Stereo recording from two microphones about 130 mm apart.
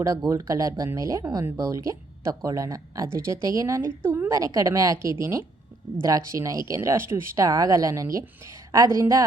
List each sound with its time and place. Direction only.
0.0 s speech: 25° right (ahead or behind)